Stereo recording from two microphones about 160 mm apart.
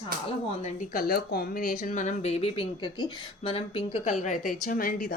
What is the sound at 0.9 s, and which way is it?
Speech, 70° left (ahead or behind).